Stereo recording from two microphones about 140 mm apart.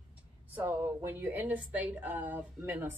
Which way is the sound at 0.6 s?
15° right (ahead or behind).